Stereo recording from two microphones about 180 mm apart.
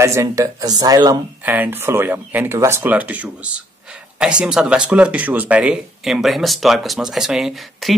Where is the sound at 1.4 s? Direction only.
10° right (ahead or behind).